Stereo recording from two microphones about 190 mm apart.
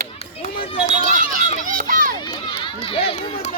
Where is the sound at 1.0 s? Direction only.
45° right (ahead or behind).